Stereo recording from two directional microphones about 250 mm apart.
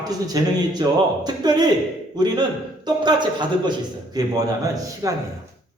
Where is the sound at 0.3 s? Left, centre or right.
Centre.